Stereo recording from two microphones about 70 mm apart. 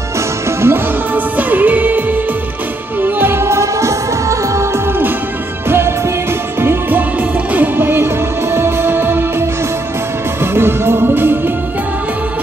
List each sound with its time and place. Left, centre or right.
0.5 s music: right
1.1 s music: right
5.7 s music: right